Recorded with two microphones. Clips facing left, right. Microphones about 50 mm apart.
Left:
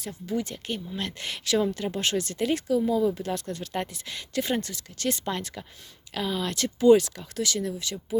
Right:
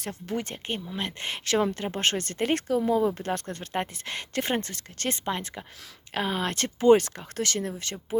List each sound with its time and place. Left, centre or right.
0.0 s speech: right
0.9 s speech: right
5.2 s speech: right
6.1 s speech: right